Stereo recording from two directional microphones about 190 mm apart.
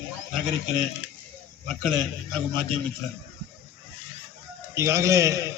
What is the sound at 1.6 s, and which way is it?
Speech, centre (ahead or behind).